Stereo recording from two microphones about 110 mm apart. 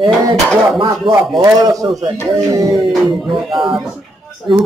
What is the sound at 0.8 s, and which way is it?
Speech, 45° right (ahead or behind).